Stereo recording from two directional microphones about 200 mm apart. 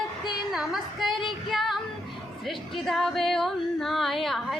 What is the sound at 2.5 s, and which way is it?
Music, centre (ahead or behind).